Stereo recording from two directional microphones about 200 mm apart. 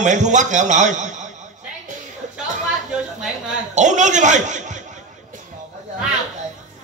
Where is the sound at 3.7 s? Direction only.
35° right (ahead or behind).